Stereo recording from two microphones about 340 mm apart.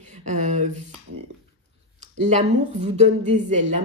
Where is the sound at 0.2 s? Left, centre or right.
Right.